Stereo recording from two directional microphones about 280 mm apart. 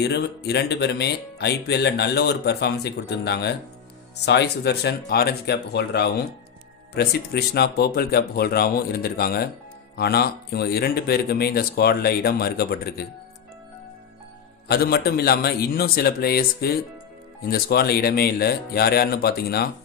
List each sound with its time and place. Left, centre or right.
0.0 s speech: left
14.7 s speech: left